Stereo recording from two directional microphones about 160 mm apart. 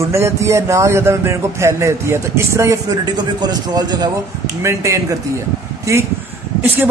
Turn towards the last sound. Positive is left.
turn(degrees=-10)  # may be behind; listen again after turning